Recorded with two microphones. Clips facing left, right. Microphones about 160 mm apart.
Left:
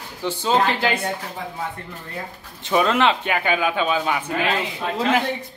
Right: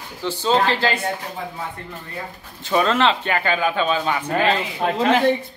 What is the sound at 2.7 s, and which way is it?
Speech, 10° left (ahead or behind).